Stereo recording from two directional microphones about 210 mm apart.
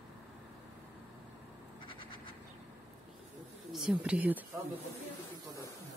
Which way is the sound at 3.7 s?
5° right (ahead or behind).